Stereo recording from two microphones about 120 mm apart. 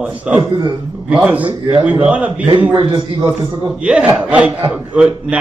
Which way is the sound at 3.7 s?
10° right (ahead or behind).